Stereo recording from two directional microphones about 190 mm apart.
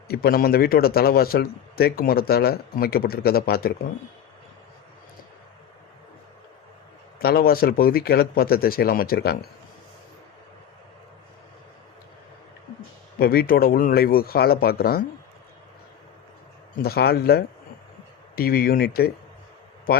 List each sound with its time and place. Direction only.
0.1 s a man's voice: 50° left (ahead or behind)
7.2 s a man's voice: 50° left (ahead or behind)
13.1 s a man's voice: 50° left (ahead or behind)
16.7 s a man's voice: 55° left (ahead or behind)